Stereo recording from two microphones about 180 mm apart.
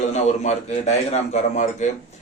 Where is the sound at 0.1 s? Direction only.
40° left (ahead or behind).